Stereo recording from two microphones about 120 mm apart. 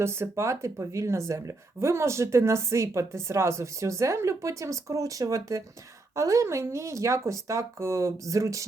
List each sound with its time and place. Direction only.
0.0 s a woman's voice: 20° right (ahead or behind)